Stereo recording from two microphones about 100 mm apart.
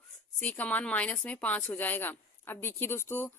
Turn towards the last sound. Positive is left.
turn(degrees=25)  # may be behind; listen again after turning